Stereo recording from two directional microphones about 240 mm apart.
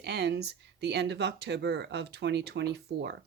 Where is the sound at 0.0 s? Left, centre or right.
Right.